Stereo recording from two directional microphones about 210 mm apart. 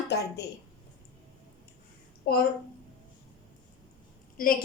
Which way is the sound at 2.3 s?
50° left (ahead or behind).